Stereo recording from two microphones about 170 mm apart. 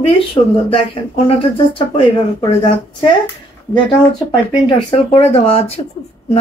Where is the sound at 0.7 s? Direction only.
30° left (ahead or behind).